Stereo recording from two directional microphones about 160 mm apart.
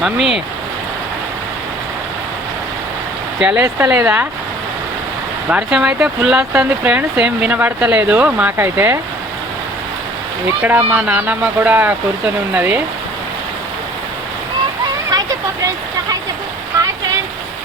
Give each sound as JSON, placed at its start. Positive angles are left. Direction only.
{"t": 0.0, "sound": "speech", "side_deg": 0}
{"t": 3.4, "sound": "speech", "side_deg": -10}
{"t": 5.5, "sound": "speech", "side_deg": -5}
{"t": 10.6, "sound": "speech", "side_deg": -10}
{"t": 15.1, "sound": "a sound", "side_deg": -25}